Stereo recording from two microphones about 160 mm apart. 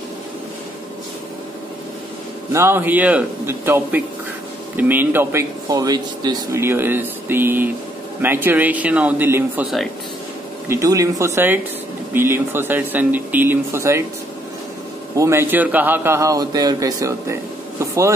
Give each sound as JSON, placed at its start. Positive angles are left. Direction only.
{"t": 2.5, "sound": "a man's voice", "side_deg": -15}
{"t": 6.6, "sound": "a man's voice", "side_deg": -15}
{"t": 10.7, "sound": "a man's voice", "side_deg": -20}
{"t": 15.1, "sound": "a man's voice", "side_deg": -15}